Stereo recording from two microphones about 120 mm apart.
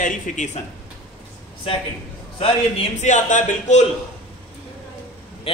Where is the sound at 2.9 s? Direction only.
90° left.